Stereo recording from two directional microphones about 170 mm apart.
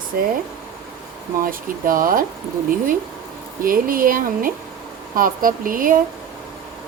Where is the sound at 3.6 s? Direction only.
55° right (ahead or behind).